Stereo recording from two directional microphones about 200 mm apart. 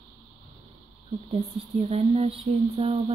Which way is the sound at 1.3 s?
30° right (ahead or behind).